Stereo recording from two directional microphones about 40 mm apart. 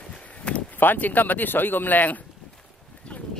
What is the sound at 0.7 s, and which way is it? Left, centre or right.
Speech, left.